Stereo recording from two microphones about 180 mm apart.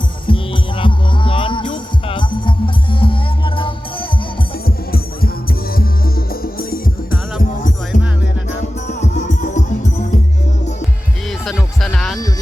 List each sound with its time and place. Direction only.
0.3 s music: 30° left (ahead or behind)
4.6 s music: 55° left (ahead or behind)
7.9 s music: 45° left (ahead or behind)
11.3 s music: centre (ahead or behind)